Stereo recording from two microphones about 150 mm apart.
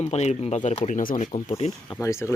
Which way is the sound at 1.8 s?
20° left (ahead or behind).